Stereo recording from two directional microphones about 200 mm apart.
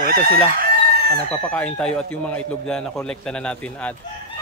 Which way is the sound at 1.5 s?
5° left (ahead or behind).